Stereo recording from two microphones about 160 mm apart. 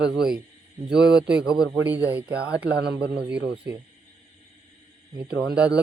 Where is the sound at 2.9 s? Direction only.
90° right.